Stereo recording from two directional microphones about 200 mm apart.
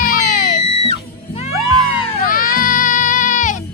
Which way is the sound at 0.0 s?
45° left (ahead or behind).